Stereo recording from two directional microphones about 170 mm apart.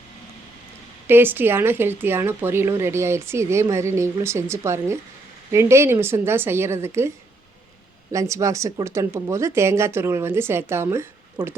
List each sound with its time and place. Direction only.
1.0 s speech: 15° right (ahead or behind)
8.1 s speech: 20° right (ahead or behind)